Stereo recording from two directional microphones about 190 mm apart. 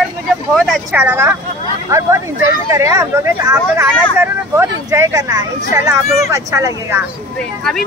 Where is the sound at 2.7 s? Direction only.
15° right (ahead or behind).